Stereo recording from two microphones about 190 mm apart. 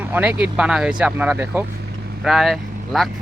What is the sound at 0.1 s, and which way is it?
Speech, 5° right (ahead or behind).